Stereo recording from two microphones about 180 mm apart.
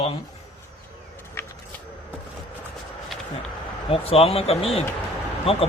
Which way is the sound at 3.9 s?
30° left (ahead or behind).